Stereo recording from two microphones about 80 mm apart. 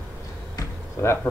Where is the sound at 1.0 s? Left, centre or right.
Left.